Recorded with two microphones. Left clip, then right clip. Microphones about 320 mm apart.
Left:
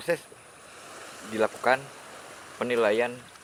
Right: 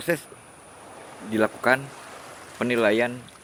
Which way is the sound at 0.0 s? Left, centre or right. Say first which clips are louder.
Right 2 dB; right.